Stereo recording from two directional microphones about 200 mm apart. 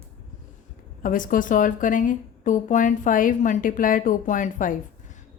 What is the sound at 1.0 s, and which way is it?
A woman's voice, 40° left (ahead or behind).